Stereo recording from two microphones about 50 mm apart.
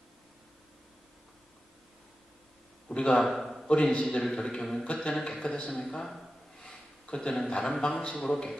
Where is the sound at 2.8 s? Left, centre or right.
Left.